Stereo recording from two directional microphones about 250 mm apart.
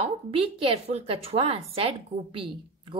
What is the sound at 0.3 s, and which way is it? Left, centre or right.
A woman's voice, right.